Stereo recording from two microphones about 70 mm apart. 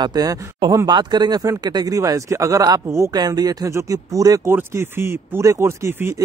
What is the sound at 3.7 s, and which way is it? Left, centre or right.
Speech, right.